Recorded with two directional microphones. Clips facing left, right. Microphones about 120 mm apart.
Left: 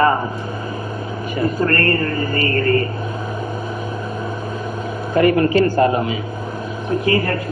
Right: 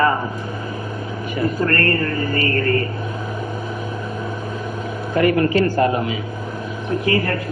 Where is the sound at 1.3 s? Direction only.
30° left (ahead or behind).